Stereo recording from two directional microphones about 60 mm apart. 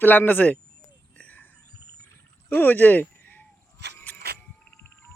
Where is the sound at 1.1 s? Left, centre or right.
Left.